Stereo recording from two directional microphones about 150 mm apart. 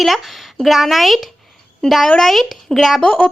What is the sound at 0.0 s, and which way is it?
Speech, centre (ahead or behind).